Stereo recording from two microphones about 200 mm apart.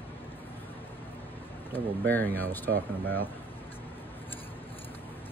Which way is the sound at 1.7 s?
10° left (ahead or behind).